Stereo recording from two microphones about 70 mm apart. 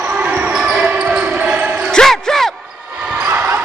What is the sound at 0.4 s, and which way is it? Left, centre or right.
Basketball bounce, centre.